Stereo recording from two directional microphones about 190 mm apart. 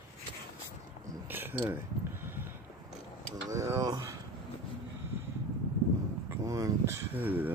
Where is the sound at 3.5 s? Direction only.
15° right (ahead or behind).